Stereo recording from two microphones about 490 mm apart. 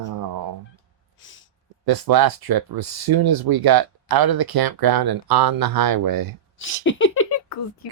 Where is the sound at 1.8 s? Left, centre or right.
Right.